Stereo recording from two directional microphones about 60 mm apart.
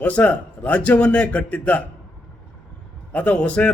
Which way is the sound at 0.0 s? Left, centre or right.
Left.